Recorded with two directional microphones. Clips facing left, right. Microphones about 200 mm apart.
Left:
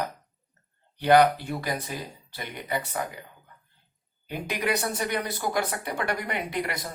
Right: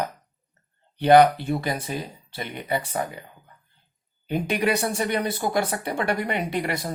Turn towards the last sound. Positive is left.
turn(degrees=-30)  # may be behind; listen again after turning